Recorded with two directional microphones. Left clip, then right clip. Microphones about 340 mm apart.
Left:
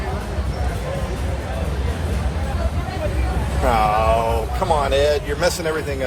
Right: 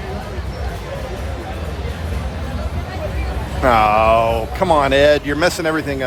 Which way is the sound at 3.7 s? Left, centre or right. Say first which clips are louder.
Right 5 dB; right.